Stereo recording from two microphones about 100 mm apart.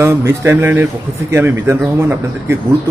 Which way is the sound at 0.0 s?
25° right (ahead or behind).